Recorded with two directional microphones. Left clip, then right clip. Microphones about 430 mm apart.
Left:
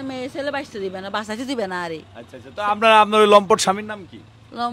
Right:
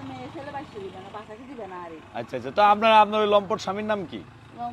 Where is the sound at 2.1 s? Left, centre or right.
Right.